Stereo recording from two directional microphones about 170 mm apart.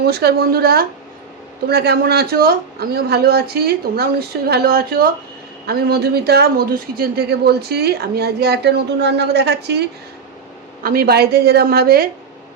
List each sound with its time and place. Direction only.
0.0 s a woman's voice: 70° right (ahead or behind)
10.8 s speech: 65° right (ahead or behind)